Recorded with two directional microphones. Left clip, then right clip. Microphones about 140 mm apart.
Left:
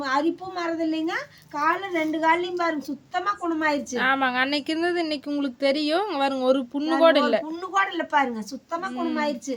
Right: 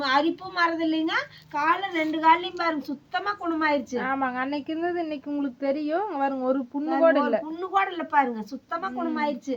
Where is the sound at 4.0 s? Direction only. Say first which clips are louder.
Left 5 dB; 25° left (ahead or behind).